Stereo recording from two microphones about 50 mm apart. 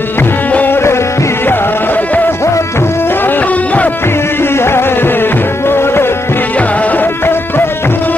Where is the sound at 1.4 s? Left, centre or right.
Left.